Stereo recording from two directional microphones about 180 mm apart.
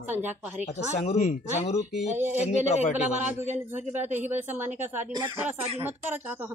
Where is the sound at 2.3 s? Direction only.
40° left (ahead or behind).